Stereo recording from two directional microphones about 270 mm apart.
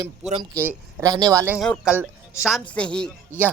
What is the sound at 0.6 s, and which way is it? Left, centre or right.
Speech, centre.